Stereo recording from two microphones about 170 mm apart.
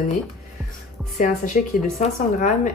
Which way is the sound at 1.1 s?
50° left (ahead or behind).